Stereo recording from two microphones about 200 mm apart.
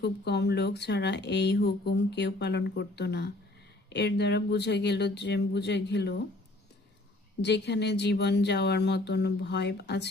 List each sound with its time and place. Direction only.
0.0 s speech: 55° left (ahead or behind)
7.4 s speech: 60° left (ahead or behind)